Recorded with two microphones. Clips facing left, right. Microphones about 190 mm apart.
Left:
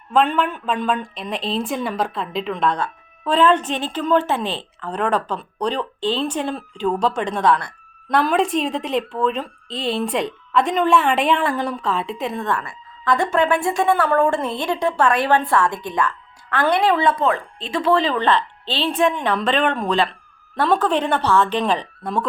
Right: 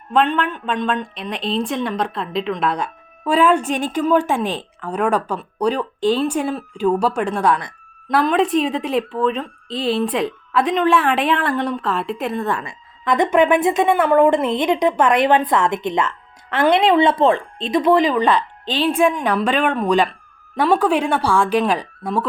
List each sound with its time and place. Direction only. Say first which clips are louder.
0.1 s a woman's voice: even; centre (ahead or behind)
8.1 s speech: right 2 dB; centre (ahead or behind)
12.5 s a woman's voice: left 1 dB; 20° right (ahead or behind)